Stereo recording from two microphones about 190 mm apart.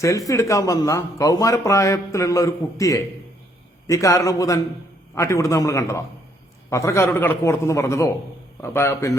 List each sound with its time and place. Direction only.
0.0 s a man's voice: 15° left (ahead or behind)